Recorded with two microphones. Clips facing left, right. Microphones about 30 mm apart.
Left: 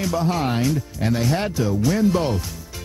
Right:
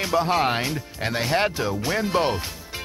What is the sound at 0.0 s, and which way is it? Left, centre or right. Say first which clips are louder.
Speech: right 1 dB; right.